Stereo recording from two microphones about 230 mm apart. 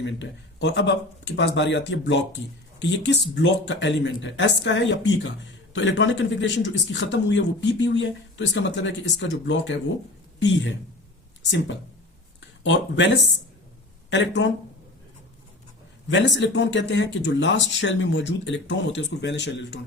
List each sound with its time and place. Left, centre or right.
0.0 s speech: left
12.4 s a sound: left
14.1 s speech: left
16.0 s speech: left